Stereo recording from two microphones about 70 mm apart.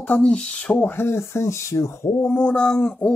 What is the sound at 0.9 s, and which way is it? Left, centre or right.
Speech, left.